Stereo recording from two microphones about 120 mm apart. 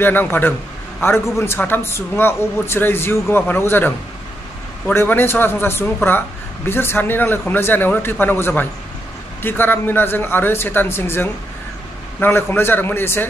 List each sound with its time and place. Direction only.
0.0 s a man's voice: 15° left (ahead or behind)
4.9 s a man's voice: 20° left (ahead or behind)